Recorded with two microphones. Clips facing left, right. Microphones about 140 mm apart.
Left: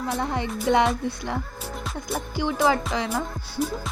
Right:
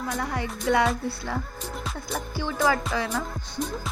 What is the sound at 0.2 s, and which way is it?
Music, 25° left (ahead or behind).